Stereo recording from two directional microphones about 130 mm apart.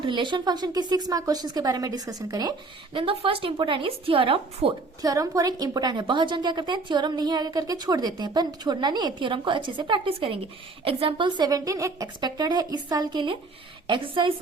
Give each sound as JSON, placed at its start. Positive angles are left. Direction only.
{"t": 0.0, "sound": "a woman's voice", "side_deg": -40}
{"t": 5.0, "sound": "a woman's voice", "side_deg": -25}